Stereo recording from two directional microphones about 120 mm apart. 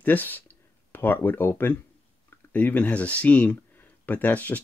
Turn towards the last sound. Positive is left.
turn(degrees=15)  # may be behind; listen again after turning